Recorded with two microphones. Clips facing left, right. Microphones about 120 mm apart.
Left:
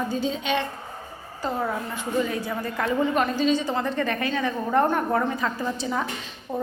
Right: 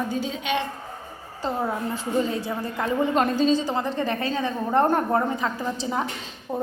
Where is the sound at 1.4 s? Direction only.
20° right (ahead or behind).